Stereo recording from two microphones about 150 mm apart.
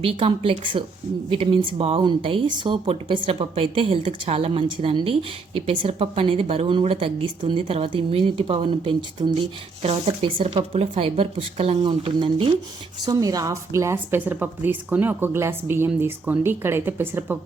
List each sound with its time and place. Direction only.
0.0 s a woman's voice: 40° right (ahead or behind)
13.1 s a woman's voice: 25° right (ahead or behind)